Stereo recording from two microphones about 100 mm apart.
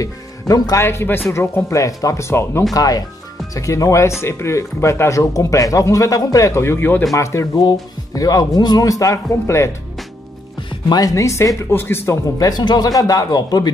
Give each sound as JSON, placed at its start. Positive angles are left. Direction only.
{"t": 0.0, "sound": "speech", "side_deg": 35}
{"t": 0.8, "sound": "speech", "side_deg": 20}
{"t": 2.7, "sound": "speech", "side_deg": 35}
{"t": 10.9, "sound": "speech", "side_deg": 35}
{"t": 12.4, "sound": "speech", "side_deg": 40}